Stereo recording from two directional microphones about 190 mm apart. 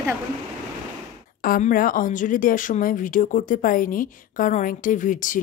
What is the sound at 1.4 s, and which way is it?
A woman's voice, 50° left (ahead or behind).